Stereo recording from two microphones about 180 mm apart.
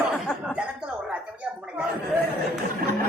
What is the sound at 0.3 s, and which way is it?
Cough, centre (ahead or behind).